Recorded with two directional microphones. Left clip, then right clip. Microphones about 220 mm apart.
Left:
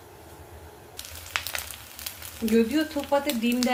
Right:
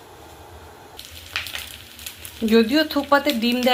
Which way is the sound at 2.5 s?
20° right (ahead or behind).